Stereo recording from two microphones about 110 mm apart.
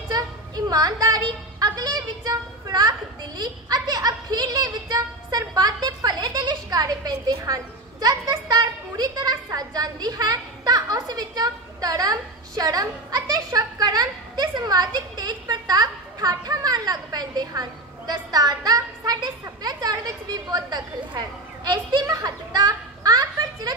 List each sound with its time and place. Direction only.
0.1 s speech: 35° right (ahead or behind)